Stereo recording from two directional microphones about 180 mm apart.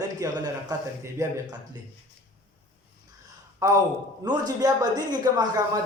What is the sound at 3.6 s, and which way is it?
A man's voice, 15° right (ahead or behind).